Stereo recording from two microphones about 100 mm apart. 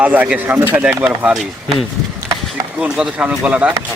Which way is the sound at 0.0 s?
15° right (ahead or behind).